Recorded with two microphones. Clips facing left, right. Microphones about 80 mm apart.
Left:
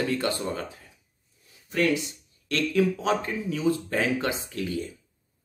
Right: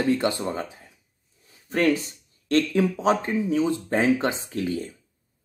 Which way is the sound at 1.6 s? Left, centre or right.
Right.